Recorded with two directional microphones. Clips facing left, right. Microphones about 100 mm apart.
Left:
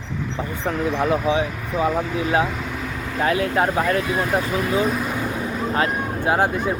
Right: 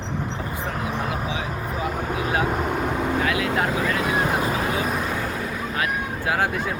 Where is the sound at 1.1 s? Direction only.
30° left (ahead or behind).